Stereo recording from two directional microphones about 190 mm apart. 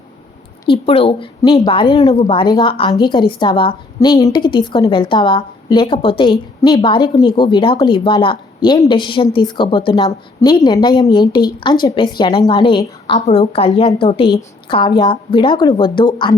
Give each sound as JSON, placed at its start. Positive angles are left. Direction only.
{"t": 0.7, "sound": "a woman's voice", "side_deg": 30}